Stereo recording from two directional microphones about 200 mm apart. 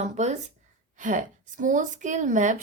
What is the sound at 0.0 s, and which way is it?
A woman's voice, 35° right (ahead or behind).